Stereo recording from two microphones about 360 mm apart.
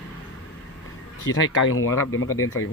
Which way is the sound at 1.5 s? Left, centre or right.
Left.